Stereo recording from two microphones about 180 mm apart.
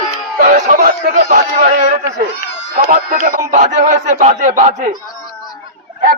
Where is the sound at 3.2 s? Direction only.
45° right (ahead or behind).